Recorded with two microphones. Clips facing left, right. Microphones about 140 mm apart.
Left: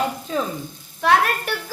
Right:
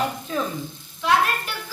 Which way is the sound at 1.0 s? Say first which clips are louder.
Left 3 dB; 60° left (ahead or behind).